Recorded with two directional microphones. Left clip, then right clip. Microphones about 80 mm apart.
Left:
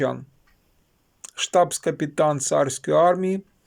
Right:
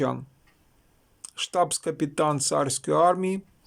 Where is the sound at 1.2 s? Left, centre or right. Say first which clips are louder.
Left 5 dB; centre.